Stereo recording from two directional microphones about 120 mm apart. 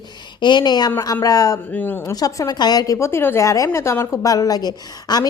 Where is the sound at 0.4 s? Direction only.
40° left (ahead or behind).